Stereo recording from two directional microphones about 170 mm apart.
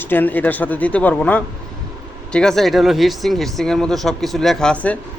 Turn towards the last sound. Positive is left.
turn(degrees=10)  # may be behind; listen again after turning